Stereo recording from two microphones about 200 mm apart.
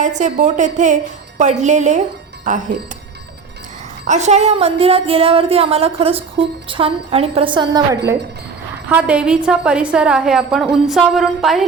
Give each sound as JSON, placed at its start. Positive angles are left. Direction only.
{"t": 0.0, "sound": "a woman's voice", "side_deg": -35}
{"t": 4.0, "sound": "speech", "side_deg": -35}
{"t": 8.9, "sound": "a woman's voice", "side_deg": -5}